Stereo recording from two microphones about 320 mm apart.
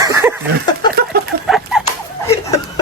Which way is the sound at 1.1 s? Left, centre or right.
Right.